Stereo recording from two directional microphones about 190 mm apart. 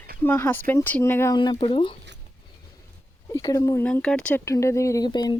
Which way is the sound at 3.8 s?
5° left (ahead or behind).